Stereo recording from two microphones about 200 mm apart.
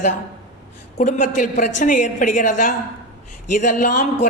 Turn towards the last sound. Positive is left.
turn(degrees=40)  # may be behind; listen again after turning